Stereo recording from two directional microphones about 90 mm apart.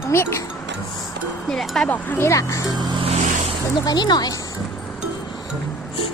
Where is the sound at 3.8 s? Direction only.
50° left (ahead or behind).